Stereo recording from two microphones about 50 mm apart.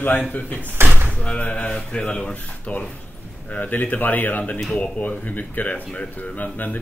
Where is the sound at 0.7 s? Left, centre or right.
Right.